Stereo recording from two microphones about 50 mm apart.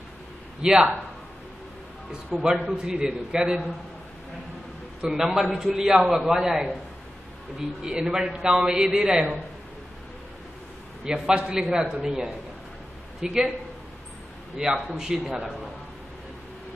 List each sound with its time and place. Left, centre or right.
0.6 s a man's voice: centre
2.3 s a man's voice: centre
5.0 s a man's voice: centre
11.2 s a man's voice: centre
14.6 s a man's voice: centre